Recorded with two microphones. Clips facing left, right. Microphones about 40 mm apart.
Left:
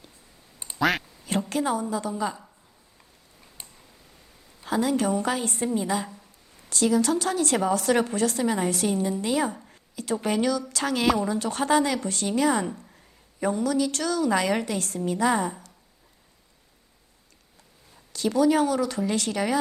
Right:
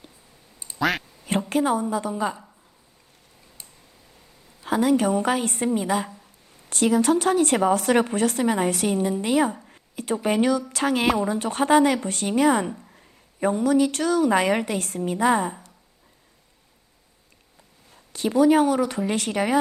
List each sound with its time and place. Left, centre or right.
0.8 s speech: centre
1.2 s a woman's voice: right
4.6 s speech: right
9.9 s a sound: right
10.2 s speech: right
12.8 s a sound: centre
13.4 s speech: right
18.1 s speech: right